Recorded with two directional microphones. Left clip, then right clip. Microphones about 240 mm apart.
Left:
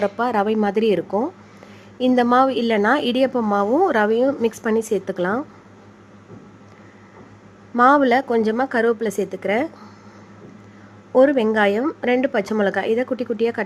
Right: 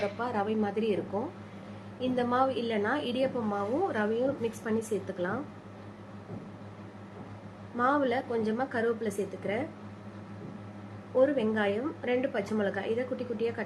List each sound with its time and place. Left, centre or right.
0.0 s a woman's voice: left
7.8 s a woman's voice: left
11.1 s a woman's voice: left